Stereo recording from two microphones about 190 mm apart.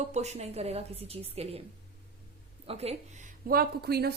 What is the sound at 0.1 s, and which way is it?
A woman's voice, 35° right (ahead or behind).